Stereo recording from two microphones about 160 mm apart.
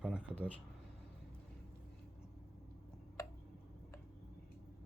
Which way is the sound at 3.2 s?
20° left (ahead or behind).